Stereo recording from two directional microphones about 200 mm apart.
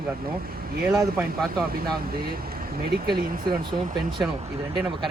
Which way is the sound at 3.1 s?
25° right (ahead or behind).